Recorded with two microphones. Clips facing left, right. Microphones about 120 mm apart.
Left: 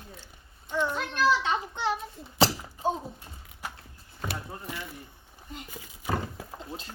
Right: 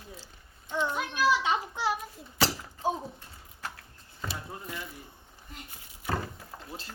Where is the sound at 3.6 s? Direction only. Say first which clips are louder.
Left 1 dB; 15° left (ahead or behind).